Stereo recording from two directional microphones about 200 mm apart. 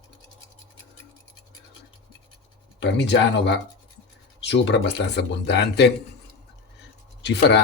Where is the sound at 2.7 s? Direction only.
60° left (ahead or behind).